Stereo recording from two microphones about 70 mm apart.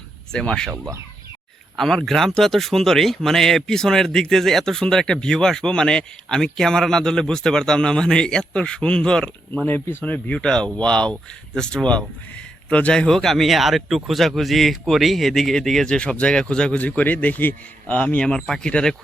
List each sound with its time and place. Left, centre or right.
0.3 s speech: centre
1.7 s a man's voice: centre
16.8 s speech: left